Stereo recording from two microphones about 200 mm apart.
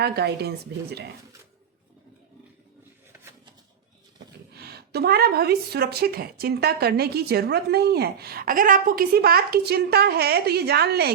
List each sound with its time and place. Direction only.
0.0 s speech: 55° right (ahead or behind)
4.5 s speech: 55° right (ahead or behind)